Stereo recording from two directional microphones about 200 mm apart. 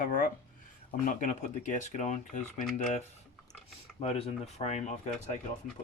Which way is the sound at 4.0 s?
30° left (ahead or behind).